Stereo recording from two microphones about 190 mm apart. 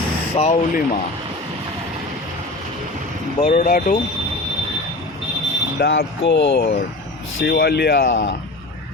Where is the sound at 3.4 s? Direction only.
45° left (ahead or behind).